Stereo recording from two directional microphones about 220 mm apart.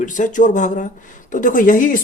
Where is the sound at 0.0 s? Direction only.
35° left (ahead or behind).